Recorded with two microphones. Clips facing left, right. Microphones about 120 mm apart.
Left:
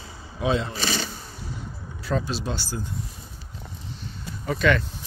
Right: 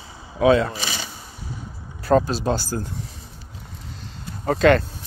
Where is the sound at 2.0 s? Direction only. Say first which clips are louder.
Right 9 dB; 45° right (ahead or behind).